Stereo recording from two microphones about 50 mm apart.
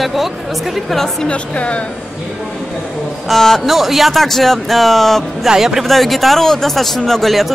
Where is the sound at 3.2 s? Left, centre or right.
Centre.